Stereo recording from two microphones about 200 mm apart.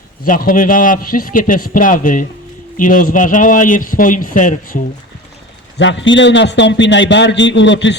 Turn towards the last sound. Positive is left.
turn(degrees=65)  # may be behind; listen again after turning